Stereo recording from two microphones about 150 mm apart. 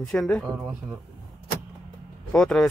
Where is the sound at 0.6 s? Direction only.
15° right (ahead or behind).